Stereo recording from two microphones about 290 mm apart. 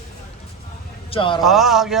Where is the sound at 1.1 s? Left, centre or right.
Centre.